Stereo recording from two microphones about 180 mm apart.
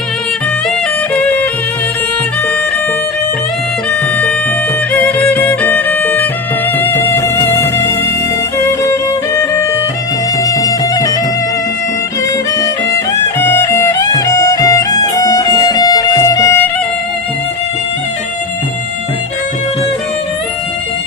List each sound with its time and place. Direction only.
1.1 s music: 10° left (ahead or behind)
4.9 s music: 10° left (ahead or behind)
12.5 s music: 20° left (ahead or behind)